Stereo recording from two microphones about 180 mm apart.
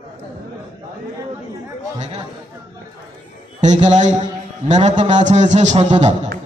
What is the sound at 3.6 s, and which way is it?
A man's voice, 40° right (ahead or behind).